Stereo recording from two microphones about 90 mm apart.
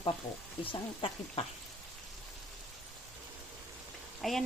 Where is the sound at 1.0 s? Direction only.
85° left.